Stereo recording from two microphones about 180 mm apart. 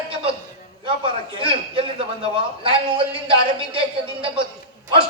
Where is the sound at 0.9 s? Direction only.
30° right (ahead or behind).